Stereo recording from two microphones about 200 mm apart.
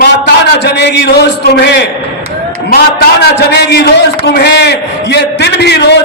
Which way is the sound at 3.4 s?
55° left (ahead or behind).